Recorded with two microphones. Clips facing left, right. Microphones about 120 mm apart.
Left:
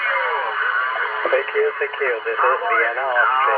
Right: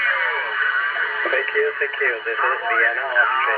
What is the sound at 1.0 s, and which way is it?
Speech, 30° left (ahead or behind).